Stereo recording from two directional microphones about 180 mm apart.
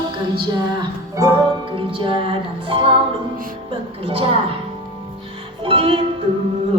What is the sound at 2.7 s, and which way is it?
Music, 30° right (ahead or behind).